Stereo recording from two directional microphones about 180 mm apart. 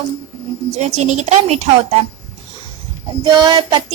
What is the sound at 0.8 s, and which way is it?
Child singing, 40° right (ahead or behind).